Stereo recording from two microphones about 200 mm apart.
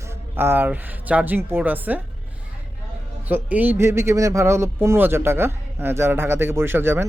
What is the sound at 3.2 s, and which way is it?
Speech, 10° right (ahead or behind).